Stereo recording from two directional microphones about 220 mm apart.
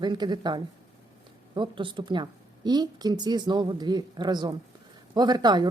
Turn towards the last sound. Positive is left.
turn(degrees=-20)  # may be behind; listen again after turning